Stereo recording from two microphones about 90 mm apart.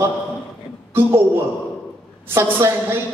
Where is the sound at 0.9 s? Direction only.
25° right (ahead or behind).